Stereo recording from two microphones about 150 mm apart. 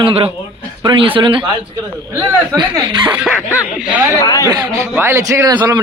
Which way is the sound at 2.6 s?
30° right (ahead or behind).